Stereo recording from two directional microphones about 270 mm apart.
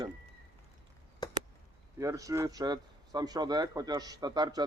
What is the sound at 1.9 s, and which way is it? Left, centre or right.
Speech, centre.